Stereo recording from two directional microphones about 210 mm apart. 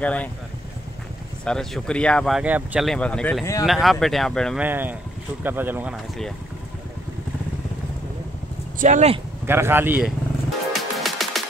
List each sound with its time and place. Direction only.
0.0 s speech: 5° left (ahead or behind)
1.4 s speech: 5° left (ahead or behind)
3.6 s speech: centre (ahead or behind)
4.6 s a man's voice: 10° right (ahead or behind)
8.7 s speech: 35° right (ahead or behind)
9.5 s a man's voice: 10° right (ahead or behind)
10.7 s music: centre (ahead or behind)